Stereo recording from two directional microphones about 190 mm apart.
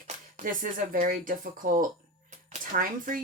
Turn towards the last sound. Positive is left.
turn(degrees=-45)  # may be behind; listen again after turning